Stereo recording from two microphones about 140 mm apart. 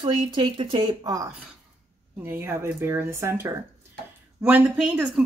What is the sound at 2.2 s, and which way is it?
A woman's voice, 15° right (ahead or behind).